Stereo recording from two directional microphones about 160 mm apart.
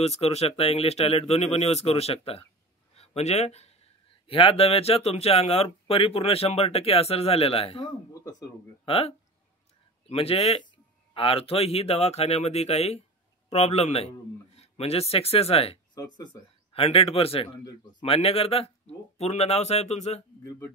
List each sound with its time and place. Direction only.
0.0 s speech: 40° left (ahead or behind)
2.9 s a sound: 40° left (ahead or behind)
4.3 s speech: 35° left (ahead or behind)
8.1 s speech: 20° left (ahead or behind)
8.8 s a man's voice: 40° left (ahead or behind)
20.4 s speech: 15° left (ahead or behind)